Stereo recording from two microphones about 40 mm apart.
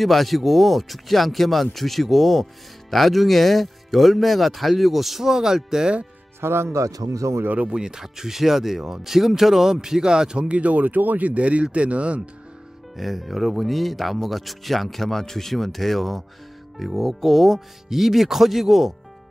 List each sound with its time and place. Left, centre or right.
0.0 s speech: centre
6.4 s speech: right
7.6 s speech: centre
10.5 s speech: right
12.9 s speech: centre